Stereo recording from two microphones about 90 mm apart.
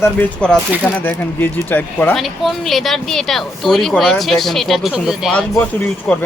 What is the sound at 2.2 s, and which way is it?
Speech, centre (ahead or behind).